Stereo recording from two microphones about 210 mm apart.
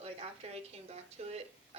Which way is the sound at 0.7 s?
30° right (ahead or behind).